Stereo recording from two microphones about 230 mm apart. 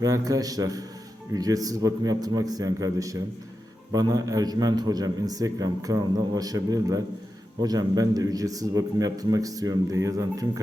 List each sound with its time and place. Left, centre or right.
0.0 s a man's voice: centre